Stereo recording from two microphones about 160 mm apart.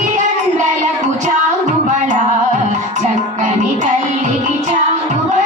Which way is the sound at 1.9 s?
50° right (ahead or behind).